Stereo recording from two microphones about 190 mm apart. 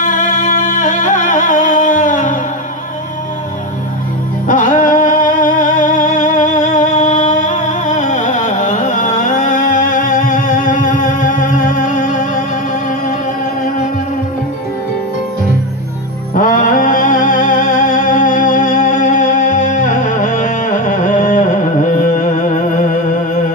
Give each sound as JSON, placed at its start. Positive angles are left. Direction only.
{"t": 0.0, "sound": "music", "side_deg": 40}
{"t": 4.4, "sound": "music", "side_deg": 40}
{"t": 16.4, "sound": "music", "side_deg": 45}